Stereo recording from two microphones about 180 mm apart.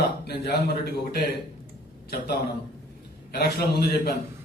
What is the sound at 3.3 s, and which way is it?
Speech, 60° left (ahead or behind).